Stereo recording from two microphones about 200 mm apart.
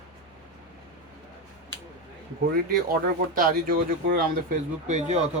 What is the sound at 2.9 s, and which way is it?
Speech, 45° right (ahead or behind).